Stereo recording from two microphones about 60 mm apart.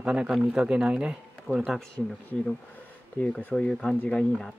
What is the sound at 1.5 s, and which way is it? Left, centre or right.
Speech, right.